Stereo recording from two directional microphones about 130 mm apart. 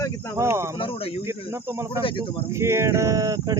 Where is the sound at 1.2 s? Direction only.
20° right (ahead or behind).